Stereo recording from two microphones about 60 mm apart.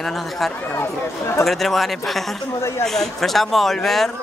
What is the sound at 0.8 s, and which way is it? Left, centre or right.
Speech, left.